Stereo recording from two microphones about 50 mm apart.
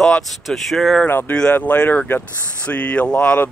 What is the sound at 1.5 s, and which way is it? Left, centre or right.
Speech, left.